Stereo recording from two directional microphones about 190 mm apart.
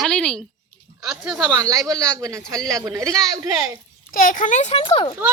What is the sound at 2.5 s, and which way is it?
Speech, 5° left (ahead or behind).